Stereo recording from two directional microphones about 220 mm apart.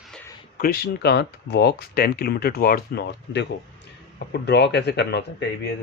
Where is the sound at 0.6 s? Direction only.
45° left (ahead or behind).